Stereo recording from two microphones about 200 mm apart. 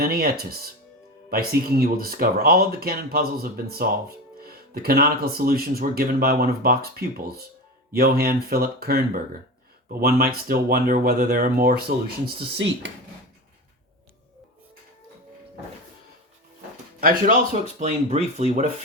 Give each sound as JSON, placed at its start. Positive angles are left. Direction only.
{"t": 0.0, "sound": "speech", "side_deg": -45}
{"t": 7.9, "sound": "speech", "side_deg": -50}
{"t": 17.0, "sound": "speech", "side_deg": -40}